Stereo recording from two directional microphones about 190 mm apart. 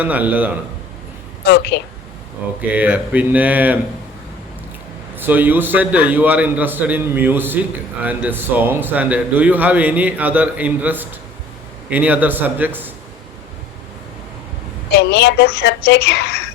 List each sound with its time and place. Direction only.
0.0 s a man's voice: 10° right (ahead or behind)
1.5 s a woman's voice: 60° left (ahead or behind)
2.6 s a man's voice: 10° right (ahead or behind)
5.1 s a man's voice: 10° right (ahead or behind)
14.9 s a woman's voice: 60° left (ahead or behind)